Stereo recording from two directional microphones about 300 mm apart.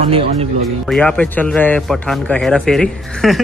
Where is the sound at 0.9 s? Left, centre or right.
Centre.